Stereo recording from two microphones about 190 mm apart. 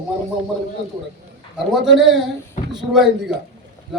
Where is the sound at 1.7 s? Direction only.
Centre (ahead or behind).